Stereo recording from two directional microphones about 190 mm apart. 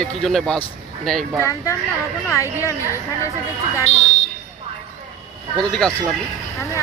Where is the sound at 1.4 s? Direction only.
15° left (ahead or behind).